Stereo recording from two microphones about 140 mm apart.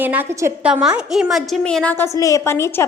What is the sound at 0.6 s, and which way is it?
A woman's voice, 5° right (ahead or behind).